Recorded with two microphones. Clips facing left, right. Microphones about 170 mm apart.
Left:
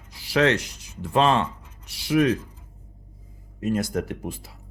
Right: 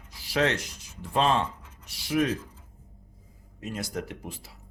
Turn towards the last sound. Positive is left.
turn(degrees=50)  # may be behind; listen again after turning